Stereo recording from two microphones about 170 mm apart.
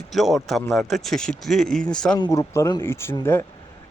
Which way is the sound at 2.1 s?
20° left (ahead or behind).